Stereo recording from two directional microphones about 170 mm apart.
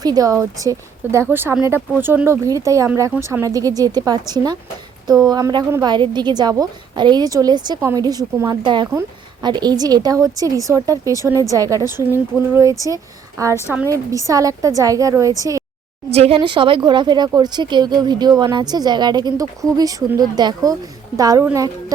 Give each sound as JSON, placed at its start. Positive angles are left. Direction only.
{"t": 0.0, "sound": "a woman's voice", "side_deg": -20}
{"t": 16.1, "sound": "a woman's voice", "side_deg": -35}